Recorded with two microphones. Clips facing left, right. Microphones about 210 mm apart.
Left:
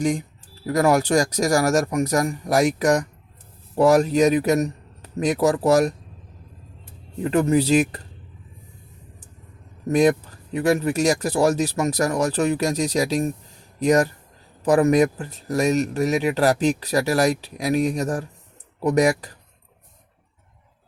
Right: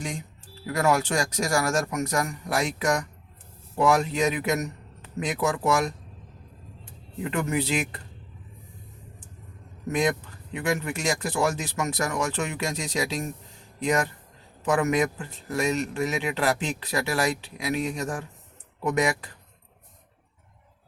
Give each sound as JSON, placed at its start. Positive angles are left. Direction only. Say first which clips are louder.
{"t": 0.6, "sound": "speech", "louder": "left 5 dB", "side_deg": 35}
{"t": 7.2, "sound": "speech", "louder": "left 8 dB", "side_deg": 35}
{"t": 9.9, "sound": "speech", "louder": "left 8 dB", "side_deg": 40}